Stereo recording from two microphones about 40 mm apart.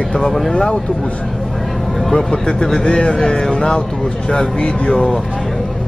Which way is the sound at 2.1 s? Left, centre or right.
Centre.